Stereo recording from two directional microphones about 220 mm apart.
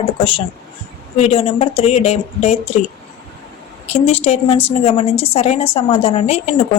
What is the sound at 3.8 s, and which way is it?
A woman's voice, 30° left (ahead or behind).